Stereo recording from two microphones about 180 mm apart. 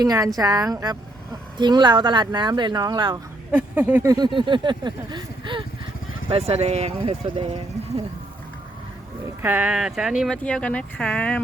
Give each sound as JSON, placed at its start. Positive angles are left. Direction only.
{"t": 0.0, "sound": "speech", "side_deg": -20}
{"t": 3.5, "sound": "a sound", "side_deg": -10}
{"t": 6.3, "sound": "speech", "side_deg": -35}
{"t": 9.4, "sound": "speech", "side_deg": -10}
{"t": 10.3, "sound": "speech", "side_deg": 5}